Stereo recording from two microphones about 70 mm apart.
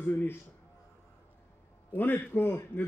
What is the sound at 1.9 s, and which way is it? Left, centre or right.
Speech, left.